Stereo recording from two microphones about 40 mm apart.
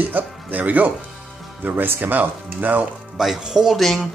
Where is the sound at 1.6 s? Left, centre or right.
Right.